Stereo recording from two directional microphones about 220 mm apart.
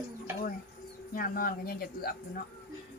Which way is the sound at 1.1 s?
40° left (ahead or behind).